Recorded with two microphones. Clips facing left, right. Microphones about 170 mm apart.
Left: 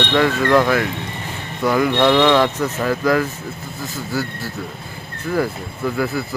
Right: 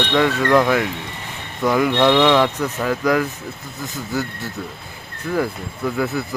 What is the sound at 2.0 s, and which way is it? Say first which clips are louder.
Speech: left 1 dB; centre (ahead or behind).